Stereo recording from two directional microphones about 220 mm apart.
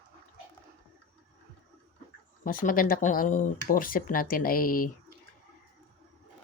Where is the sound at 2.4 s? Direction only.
40° left (ahead or behind).